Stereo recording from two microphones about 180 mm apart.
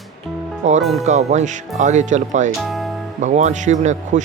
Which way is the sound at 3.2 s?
40° right (ahead or behind).